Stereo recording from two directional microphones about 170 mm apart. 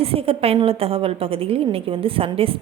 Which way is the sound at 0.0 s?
35° right (ahead or behind).